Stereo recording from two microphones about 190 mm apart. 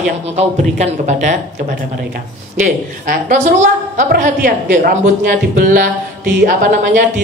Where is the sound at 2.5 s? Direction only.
40° right (ahead or behind).